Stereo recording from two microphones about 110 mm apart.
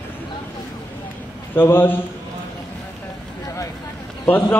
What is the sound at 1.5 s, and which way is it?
Speech, 20° left (ahead or behind).